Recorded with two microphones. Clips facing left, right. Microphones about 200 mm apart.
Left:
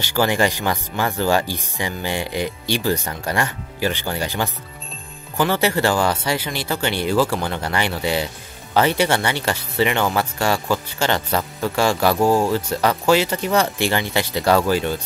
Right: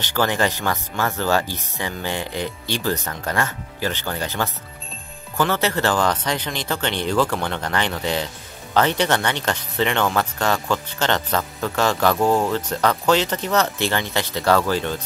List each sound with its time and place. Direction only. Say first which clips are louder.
0.0 s speech: left 2 dB; 10° left (ahead or behind)